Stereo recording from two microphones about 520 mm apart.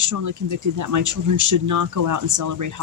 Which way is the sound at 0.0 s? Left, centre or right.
Right.